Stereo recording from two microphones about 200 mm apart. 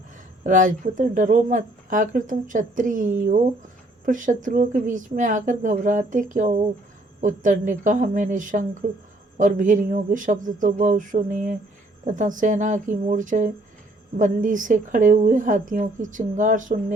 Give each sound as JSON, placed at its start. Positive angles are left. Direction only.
{"t": 0.4, "sound": "speech", "side_deg": -40}